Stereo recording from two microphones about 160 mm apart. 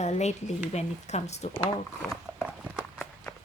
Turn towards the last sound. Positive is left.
turn(degrees=0)  # may be behind; listen again after turning